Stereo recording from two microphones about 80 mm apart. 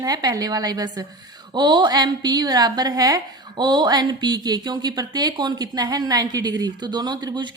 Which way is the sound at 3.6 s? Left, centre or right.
Right.